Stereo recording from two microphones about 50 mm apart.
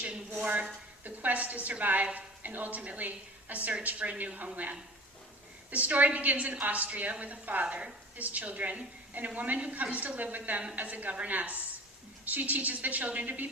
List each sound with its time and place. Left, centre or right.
1.0 s a woman's voice: right